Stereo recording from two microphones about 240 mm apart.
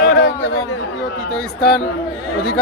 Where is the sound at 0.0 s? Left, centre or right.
Left.